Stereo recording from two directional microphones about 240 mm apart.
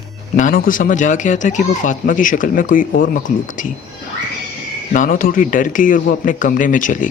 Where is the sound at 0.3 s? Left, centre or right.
Left.